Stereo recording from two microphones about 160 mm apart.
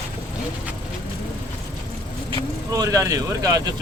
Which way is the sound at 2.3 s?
20° right (ahead or behind).